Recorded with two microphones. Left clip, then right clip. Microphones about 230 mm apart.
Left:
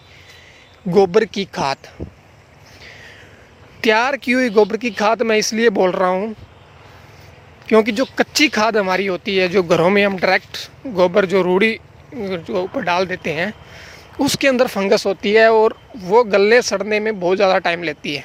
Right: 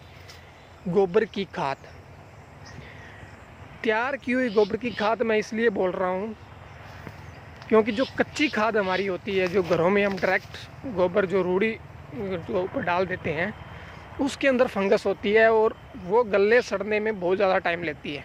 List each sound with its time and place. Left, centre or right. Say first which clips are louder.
0.9 s speech: left 8 dB; left
3.8 s speech: left 10 dB; left
7.7 s speech: left 7 dB; left